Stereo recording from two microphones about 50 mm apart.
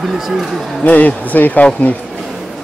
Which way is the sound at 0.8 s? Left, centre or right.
Left.